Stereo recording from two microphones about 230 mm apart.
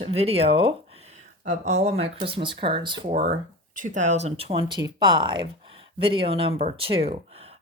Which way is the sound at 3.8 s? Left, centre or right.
Right.